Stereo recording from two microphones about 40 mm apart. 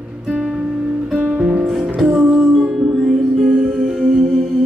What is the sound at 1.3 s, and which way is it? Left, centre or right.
Music, right.